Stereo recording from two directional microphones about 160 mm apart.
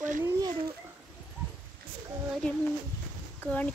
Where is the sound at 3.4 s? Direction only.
10° left (ahead or behind).